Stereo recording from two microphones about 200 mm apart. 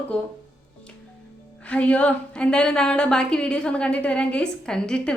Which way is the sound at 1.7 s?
5° left (ahead or behind).